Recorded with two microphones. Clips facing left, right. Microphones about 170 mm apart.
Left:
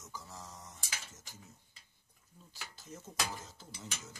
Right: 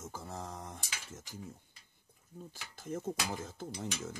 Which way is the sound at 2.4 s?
50° right (ahead or behind).